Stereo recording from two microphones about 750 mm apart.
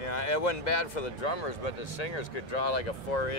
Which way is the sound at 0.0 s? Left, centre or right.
Left.